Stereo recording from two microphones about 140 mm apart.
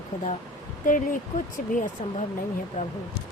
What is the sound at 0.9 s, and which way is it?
Speech, 75° left (ahead or behind).